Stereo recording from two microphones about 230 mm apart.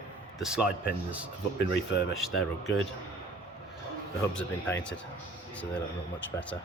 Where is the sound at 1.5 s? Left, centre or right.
Left.